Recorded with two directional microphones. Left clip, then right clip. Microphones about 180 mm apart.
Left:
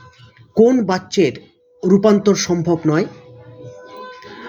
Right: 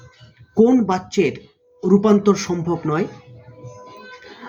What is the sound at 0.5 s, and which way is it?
Speech, 20° left (ahead or behind).